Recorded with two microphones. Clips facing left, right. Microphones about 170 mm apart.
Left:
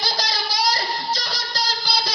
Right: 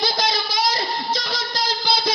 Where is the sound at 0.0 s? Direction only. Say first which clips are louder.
Right 4 dB; 55° right (ahead or behind).